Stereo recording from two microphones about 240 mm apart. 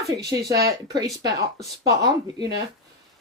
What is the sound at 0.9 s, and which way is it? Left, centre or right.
Speech, centre.